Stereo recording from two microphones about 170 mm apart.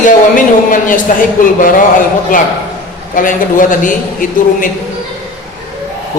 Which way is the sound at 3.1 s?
55° left (ahead or behind).